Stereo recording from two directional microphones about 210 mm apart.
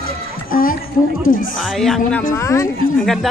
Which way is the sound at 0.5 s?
40° left (ahead or behind).